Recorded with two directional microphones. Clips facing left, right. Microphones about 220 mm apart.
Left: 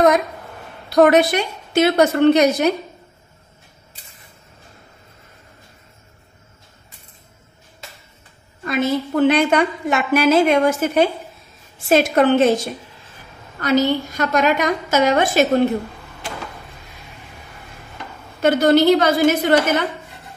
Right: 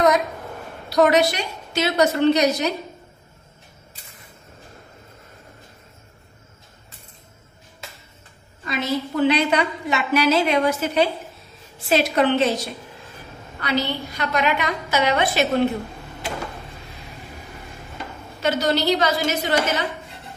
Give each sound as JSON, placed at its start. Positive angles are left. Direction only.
{"t": 0.8, "sound": "a woman's voice", "side_deg": 55}
{"t": 8.6, "sound": "a woman's voice", "side_deg": 50}
{"t": 18.4, "sound": "a woman's voice", "side_deg": 55}